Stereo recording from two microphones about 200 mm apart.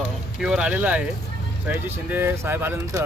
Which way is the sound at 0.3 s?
5° right (ahead or behind).